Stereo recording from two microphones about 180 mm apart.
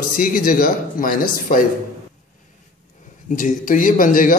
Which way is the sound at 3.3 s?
45° left (ahead or behind).